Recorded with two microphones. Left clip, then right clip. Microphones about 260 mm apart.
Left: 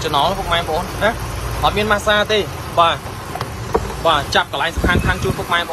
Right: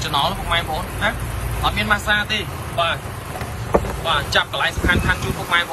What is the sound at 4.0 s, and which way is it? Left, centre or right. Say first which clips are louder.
Speech: left 4 dB; centre.